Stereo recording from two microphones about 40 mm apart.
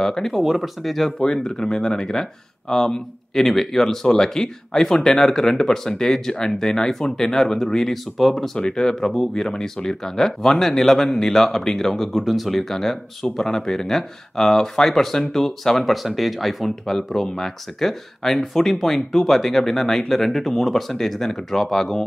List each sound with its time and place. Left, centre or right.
0.0 s speech: centre
0.3 s speech: centre
1.2 s speech: centre
8.5 s speech: centre